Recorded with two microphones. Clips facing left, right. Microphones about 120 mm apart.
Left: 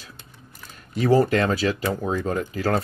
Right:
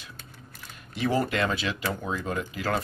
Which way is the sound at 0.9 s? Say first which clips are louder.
Left 7 dB; 40° left (ahead or behind).